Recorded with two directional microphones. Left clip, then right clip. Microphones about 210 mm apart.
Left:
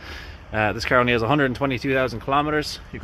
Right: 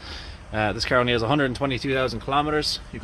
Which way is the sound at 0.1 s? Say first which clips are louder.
Left 3 dB; 5° left (ahead or behind).